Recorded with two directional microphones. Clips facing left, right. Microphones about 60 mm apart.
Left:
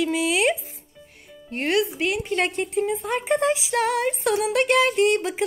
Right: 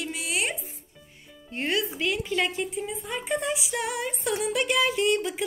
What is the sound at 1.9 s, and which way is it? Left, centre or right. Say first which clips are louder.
Speech: left 3 dB; left.